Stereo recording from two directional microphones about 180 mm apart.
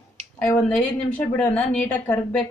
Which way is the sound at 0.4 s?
5° left (ahead or behind).